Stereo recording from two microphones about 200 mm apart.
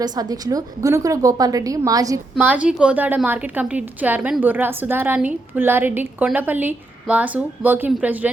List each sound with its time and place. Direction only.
0.0 s a woman's voice: 20° right (ahead or behind)
2.3 s a woman's voice: 5° right (ahead or behind)